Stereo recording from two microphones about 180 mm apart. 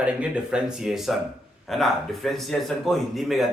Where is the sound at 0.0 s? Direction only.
5° right (ahead or behind).